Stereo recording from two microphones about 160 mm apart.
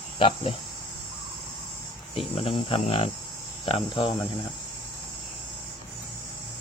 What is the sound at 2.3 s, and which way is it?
Speech, 35° left (ahead or behind).